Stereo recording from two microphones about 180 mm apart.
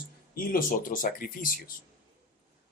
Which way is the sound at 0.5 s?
50° left (ahead or behind).